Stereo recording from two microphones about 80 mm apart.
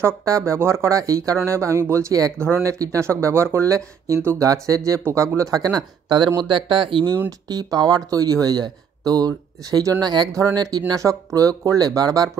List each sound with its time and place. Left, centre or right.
0.0 s speech: right
4.2 s speech: right
4.5 s speech: right
6.1 s speech: right
7.2 s speech: right